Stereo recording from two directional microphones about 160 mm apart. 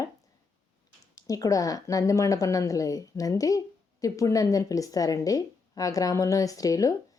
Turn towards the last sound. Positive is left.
turn(degrees=20)  # may be behind; listen again after turning